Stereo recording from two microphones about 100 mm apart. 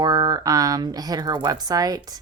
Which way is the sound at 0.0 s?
40° right (ahead or behind).